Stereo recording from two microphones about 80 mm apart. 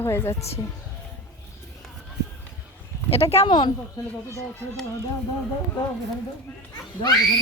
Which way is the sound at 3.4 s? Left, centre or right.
Left.